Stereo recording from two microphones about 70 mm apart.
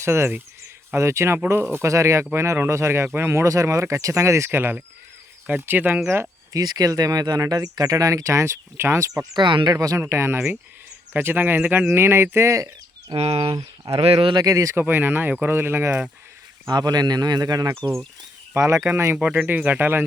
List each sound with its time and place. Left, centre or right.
0.0 s speech: right
4.4 s speech: right
6.5 s speech: right
9.3 s speech: right
9.7 s speech: right
10.1 s speech: right
11.9 s speech: right
13.1 s speech: right
14.3 s speech: right
14.8 s speech: right
16.6 s speech: right
18.5 s speech: right
19.1 s speech: centre